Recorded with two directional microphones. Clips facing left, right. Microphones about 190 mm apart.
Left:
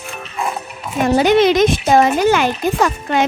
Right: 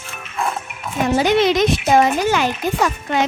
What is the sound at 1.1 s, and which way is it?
A woman's voice, 55° left (ahead or behind).